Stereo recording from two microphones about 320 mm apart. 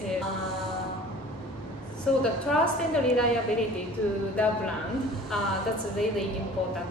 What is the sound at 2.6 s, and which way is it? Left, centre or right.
Speech, centre.